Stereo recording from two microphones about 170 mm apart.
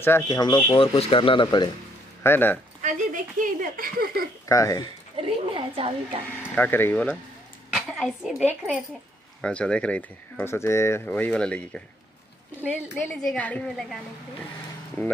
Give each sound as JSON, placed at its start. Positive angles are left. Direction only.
{"t": 0.0, "sound": "speech", "side_deg": 20}
{"t": 0.7, "sound": "speech", "side_deg": 35}
{"t": 2.2, "sound": "speech", "side_deg": 10}
{"t": 2.8, "sound": "a sound", "side_deg": -50}
{"t": 4.5, "sound": "speech", "side_deg": 20}
{"t": 5.1, "sound": "a sound", "side_deg": -30}
{"t": 6.5, "sound": "speech", "side_deg": 10}
{"t": 7.7, "sound": "a woman's voice", "side_deg": 0}
{"t": 9.4, "sound": "speech", "side_deg": 5}
{"t": 12.9, "sound": "speech", "side_deg": 10}